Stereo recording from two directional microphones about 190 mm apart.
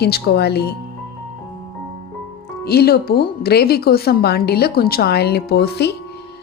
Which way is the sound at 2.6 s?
55° left (ahead or behind).